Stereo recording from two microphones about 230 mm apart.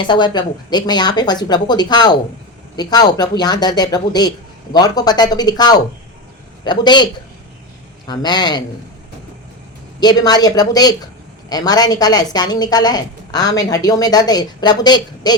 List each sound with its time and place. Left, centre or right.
0.0 s a woman's voice: centre
10.0 s a woman's voice: centre